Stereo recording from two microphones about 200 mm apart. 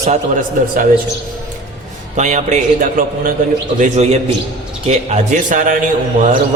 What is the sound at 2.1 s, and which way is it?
A man's voice, 35° right (ahead or behind).